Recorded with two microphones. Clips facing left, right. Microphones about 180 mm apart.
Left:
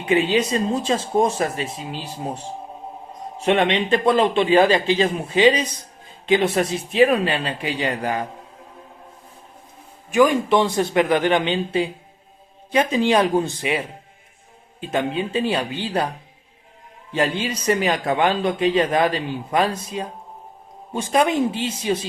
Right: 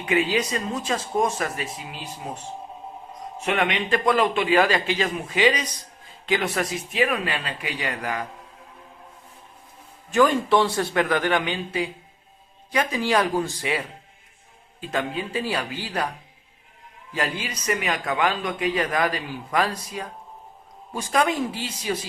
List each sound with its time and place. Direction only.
0.0 s a man's voice: 25° left (ahead or behind)
10.1 s a man's voice: 15° left (ahead or behind)
17.1 s a man's voice: 25° left (ahead or behind)